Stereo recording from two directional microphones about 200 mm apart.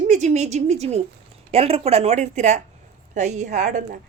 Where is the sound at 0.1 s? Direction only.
35° right (ahead or behind).